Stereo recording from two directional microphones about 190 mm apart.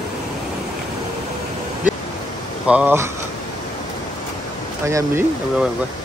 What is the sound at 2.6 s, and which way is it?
Speech, 5° right (ahead or behind).